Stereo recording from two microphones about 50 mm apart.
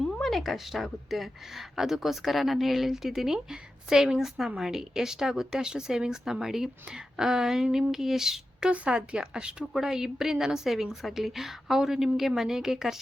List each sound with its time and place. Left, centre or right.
0.0 s a woman's voice: centre
9.7 s speech: centre